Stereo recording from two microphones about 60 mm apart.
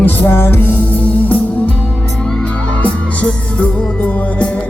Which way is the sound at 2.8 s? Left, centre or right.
Left.